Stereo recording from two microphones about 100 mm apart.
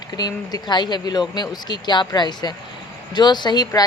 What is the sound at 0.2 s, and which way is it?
Speech, 40° left (ahead or behind).